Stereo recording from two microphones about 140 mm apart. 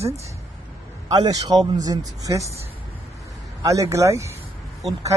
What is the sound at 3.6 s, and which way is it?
Speech, 25° right (ahead or behind).